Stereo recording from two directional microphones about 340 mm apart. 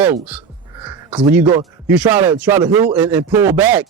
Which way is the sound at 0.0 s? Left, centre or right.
Centre.